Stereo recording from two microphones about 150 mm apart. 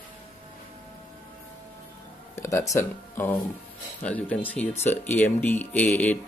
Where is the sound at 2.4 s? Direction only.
20° left (ahead or behind).